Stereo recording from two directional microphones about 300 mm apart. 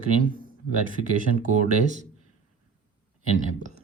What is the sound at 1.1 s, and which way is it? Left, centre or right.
Speech, right.